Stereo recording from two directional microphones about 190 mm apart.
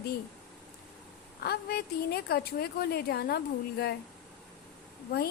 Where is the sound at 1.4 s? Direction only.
55° left (ahead or behind).